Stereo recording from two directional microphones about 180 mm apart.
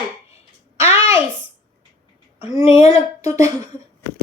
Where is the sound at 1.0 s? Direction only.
30° left (ahead or behind).